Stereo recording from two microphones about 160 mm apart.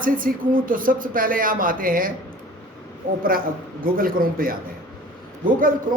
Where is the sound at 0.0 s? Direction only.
60° right (ahead or behind).